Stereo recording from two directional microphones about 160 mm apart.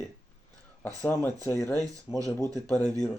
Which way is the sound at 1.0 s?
15° left (ahead or behind).